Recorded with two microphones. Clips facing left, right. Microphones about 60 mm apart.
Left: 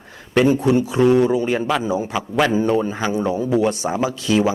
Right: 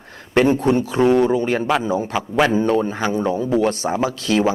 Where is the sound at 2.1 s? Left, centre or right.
Centre.